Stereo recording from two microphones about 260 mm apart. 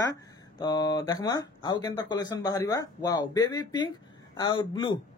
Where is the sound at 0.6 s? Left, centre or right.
Centre.